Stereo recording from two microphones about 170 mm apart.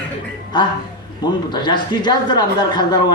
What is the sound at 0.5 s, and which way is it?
Speech, 25° left (ahead or behind).